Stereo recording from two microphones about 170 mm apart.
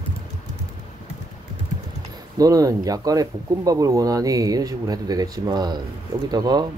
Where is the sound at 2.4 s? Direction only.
20° right (ahead or behind).